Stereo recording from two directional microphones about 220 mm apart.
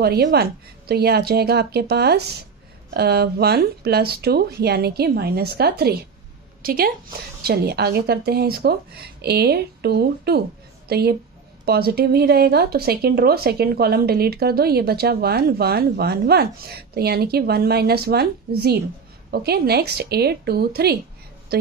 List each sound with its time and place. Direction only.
0.0 s a woman's voice: 45° right (ahead or behind)